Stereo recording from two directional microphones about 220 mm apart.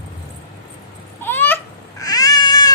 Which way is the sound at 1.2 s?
10° left (ahead or behind).